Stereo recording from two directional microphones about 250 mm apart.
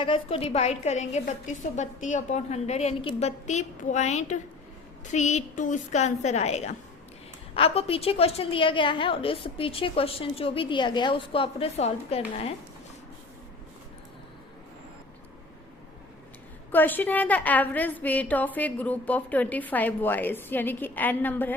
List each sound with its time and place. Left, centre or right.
0.0 s a woman's voice: left
16.7 s a woman's voice: centre